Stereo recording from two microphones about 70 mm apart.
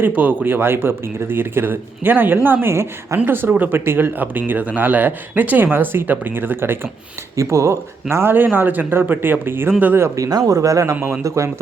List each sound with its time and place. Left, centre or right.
0.0 s speech: right
7.3 s speech: right
8.1 s speech: right
10.2 s speech: right